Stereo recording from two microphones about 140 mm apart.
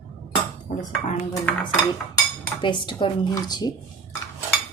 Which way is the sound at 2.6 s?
35° left (ahead or behind).